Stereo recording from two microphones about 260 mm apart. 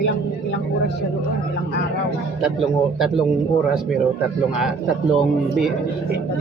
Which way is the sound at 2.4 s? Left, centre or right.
Centre.